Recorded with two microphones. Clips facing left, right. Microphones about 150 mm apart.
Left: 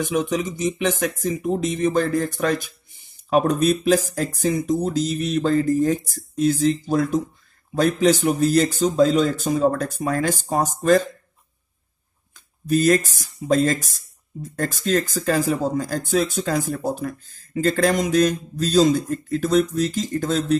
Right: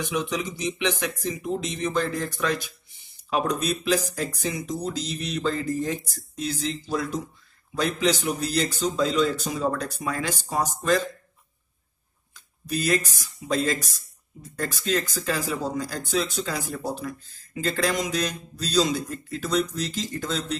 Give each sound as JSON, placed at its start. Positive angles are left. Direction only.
{"t": 0.0, "sound": "speech", "side_deg": 45}
{"t": 12.4, "sound": "a sound", "side_deg": 45}
{"t": 13.1, "sound": "speech", "side_deg": 45}